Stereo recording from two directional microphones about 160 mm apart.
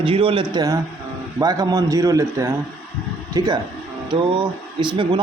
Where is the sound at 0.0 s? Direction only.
35° right (ahead or behind).